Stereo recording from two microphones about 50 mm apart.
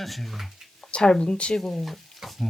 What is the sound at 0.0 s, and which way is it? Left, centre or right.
Speech, centre.